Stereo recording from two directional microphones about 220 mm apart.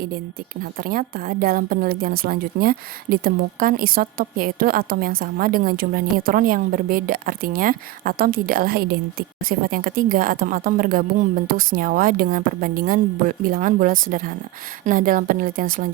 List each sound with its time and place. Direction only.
0.6 s a woman's voice: 40° right (ahead or behind)